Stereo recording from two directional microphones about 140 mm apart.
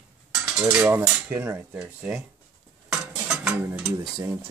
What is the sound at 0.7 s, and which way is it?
Cutlery, 15° right (ahead or behind).